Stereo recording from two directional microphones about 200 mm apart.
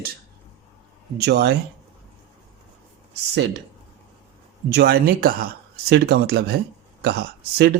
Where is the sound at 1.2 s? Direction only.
55° right (ahead or behind).